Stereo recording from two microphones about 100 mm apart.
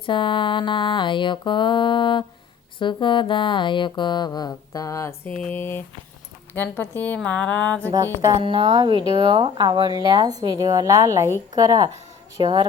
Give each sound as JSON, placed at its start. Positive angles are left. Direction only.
{"t": 0.0, "sound": "a sound", "side_deg": 55}
{"t": 5.2, "sound": "music", "side_deg": 10}
{"t": 5.5, "sound": "speech", "side_deg": 20}
{"t": 7.2, "sound": "music", "side_deg": 10}
{"t": 7.9, "sound": "music", "side_deg": -35}
{"t": 8.4, "sound": "speech", "side_deg": -65}